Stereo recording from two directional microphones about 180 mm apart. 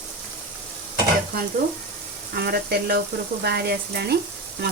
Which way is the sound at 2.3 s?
65° right (ahead or behind).